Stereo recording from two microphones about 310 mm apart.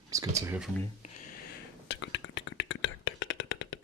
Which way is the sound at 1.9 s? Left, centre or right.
Left.